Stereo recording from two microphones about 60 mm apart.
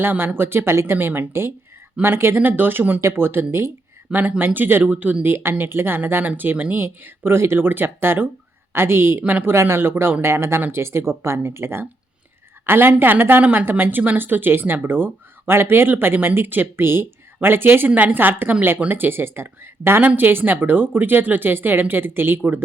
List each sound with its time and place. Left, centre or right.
0.0 s speech: right
0.9 s speech: right
3.0 s speech: right
4.1 s speech: right
7.3 s speech: right